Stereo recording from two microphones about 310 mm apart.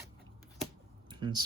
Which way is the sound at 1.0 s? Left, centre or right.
Centre.